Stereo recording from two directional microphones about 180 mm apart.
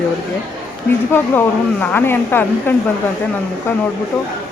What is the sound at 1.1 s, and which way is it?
Speech, 10° left (ahead or behind).